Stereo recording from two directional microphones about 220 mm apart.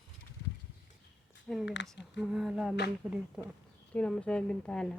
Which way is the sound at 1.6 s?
55° left (ahead or behind).